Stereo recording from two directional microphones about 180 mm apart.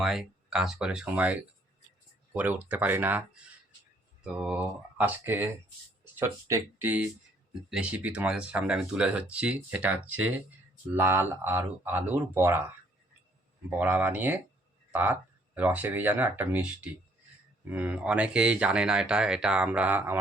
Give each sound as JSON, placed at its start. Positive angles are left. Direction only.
{"t": 0.0, "sound": "speech", "side_deg": 0}
{"t": 13.7, "sound": "speech", "side_deg": -10}